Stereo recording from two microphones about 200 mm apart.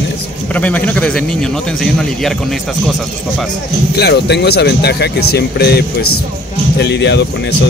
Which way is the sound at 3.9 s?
55° left (ahead or behind).